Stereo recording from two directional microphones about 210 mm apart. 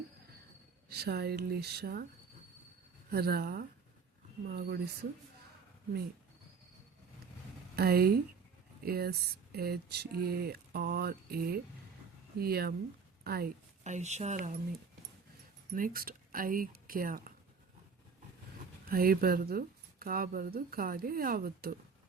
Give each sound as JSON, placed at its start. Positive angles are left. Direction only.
{"t": 0.9, "sound": "a woman's voice", "side_deg": -50}
{"t": 3.1, "sound": "a woman's voice", "side_deg": -50}
{"t": 7.8, "sound": "a woman's voice", "side_deg": -45}
{"t": 15.7, "sound": "speech", "side_deg": -45}
{"t": 18.9, "sound": "a woman's voice", "side_deg": -45}